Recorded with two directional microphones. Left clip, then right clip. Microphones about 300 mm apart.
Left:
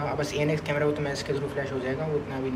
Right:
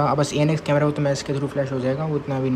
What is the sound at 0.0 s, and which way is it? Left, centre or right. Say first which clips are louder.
Speech: right 7 dB; centre.